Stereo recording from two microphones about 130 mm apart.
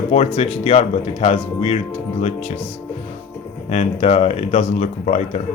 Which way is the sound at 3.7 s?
55° left (ahead or behind).